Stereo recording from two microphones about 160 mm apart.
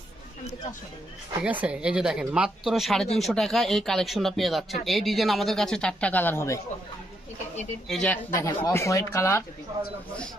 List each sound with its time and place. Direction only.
1.4 s speech: 10° right (ahead or behind); by 6.6 s 15° left (ahead or behind)
7.9 s speech: 5° left (ahead or behind)
8.3 s speech: 20° left (ahead or behind)